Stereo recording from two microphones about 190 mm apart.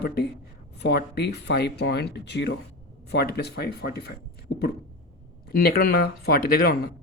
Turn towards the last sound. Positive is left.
turn(degrees=50)  # may be behind; listen again after turning